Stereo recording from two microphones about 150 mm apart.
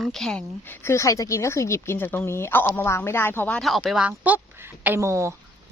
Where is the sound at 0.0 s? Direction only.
Centre (ahead or behind).